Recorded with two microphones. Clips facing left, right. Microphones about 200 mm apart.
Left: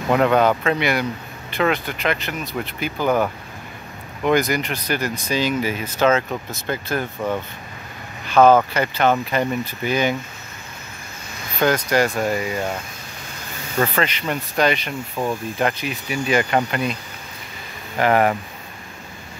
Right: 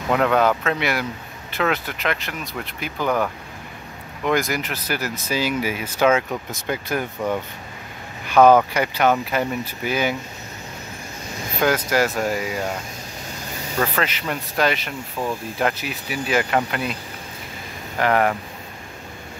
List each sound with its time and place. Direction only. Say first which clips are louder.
0.1 s speech: left 2 dB; 5° left (ahead or behind)
8.3 s speech: even; 10° right (ahead or behind)
11.6 s speech: left 1 dB; 5° right (ahead or behind)
13.7 s speech: left 2 dB; centre (ahead or behind)
15.2 s speech: left 2 dB; 15° left (ahead or behind)
15.6 s speech: even; 5° right (ahead or behind)
17.9 s speech: left 2 dB; 5° left (ahead or behind)